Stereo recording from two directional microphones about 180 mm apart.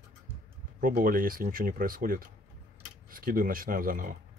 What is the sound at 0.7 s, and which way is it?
Speech, 50° right (ahead or behind).